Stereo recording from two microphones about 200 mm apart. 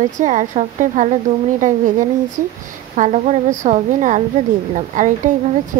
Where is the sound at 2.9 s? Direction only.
35° right (ahead or behind).